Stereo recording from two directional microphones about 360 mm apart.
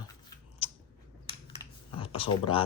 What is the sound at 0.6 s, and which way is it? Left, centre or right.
Scissors, centre.